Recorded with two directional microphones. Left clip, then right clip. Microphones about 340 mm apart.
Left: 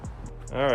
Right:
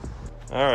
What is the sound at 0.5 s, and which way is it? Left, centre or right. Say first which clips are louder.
Speech: right 3 dB; centre.